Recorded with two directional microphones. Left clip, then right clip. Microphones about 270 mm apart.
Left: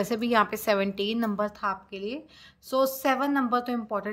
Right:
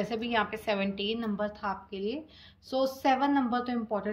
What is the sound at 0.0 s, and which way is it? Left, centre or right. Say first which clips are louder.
A woman's voice: left 5 dB; centre.